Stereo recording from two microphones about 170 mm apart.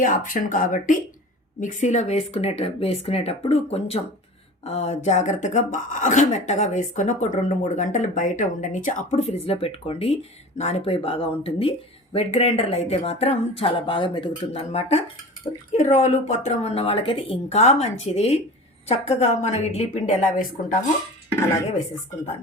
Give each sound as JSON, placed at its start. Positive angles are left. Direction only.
{"t": 0.0, "sound": "speech", "side_deg": 50}